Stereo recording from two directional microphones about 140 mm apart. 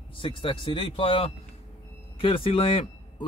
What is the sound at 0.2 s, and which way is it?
A man's voice, 40° left (ahead or behind).